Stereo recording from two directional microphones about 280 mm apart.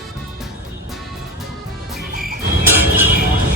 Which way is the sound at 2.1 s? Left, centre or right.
Right.